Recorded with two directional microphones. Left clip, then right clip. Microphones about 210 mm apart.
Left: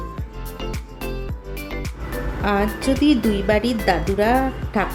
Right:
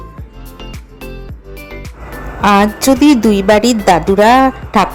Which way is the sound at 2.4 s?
35° right (ahead or behind).